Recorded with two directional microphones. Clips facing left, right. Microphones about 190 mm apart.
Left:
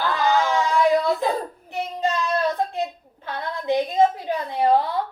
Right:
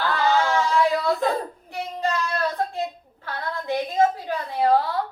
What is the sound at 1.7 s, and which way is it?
Child singing, 20° left (ahead or behind).